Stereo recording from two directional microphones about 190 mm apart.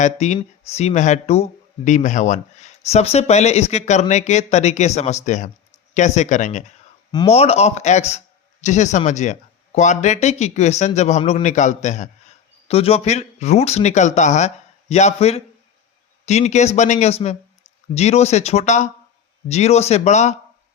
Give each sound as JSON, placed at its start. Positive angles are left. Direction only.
{"t": 0.0, "sound": "speech", "side_deg": 35}
{"t": 7.1, "sound": "speech", "side_deg": 25}